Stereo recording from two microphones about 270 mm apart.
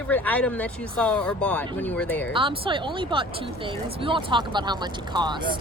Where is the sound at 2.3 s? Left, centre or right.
Centre.